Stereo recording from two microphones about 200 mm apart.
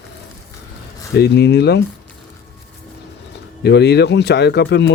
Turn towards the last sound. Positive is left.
turn(degrees=60)  # may be behind; listen again after turning